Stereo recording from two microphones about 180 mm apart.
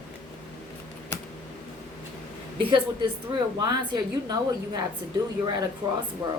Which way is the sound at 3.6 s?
20° right (ahead or behind).